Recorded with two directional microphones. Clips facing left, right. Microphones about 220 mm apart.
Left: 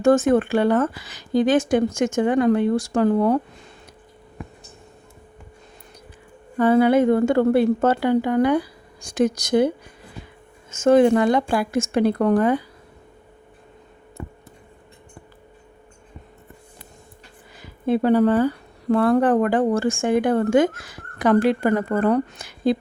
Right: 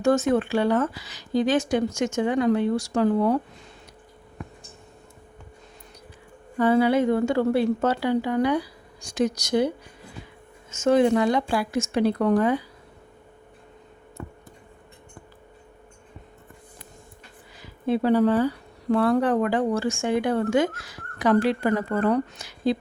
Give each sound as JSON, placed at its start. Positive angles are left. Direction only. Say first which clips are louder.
{"t": 0.0, "sound": "speech", "louder": "left 4 dB", "side_deg": 50}
{"t": 6.6, "sound": "speech", "louder": "left 4 dB", "side_deg": 50}
{"t": 14.2, "sound": "a sound", "louder": "left 2 dB", "side_deg": 5}
{"t": 17.6, "sound": "speech", "louder": "left 3 dB", "side_deg": 50}